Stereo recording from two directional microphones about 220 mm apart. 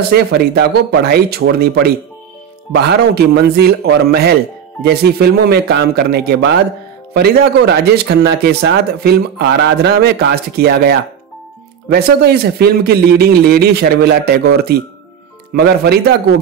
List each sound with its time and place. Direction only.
0.1 s speech: 45° right (ahead or behind)